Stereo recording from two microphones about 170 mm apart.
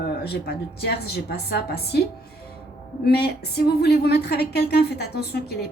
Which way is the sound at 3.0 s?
70° left (ahead or behind).